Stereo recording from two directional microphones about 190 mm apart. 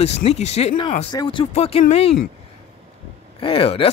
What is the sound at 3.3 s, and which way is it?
Speech, 30° left (ahead or behind).